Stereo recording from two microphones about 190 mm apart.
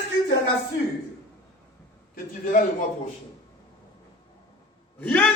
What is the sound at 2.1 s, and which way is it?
Speech, 45° left (ahead or behind).